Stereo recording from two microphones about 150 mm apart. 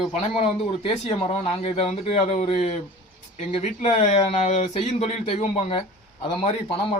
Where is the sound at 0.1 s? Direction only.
40° left (ahead or behind).